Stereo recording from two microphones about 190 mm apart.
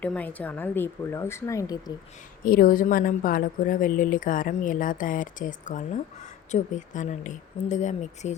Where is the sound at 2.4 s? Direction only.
50° left (ahead or behind).